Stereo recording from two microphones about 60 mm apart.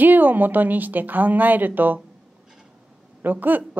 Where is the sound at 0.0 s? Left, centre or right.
Right.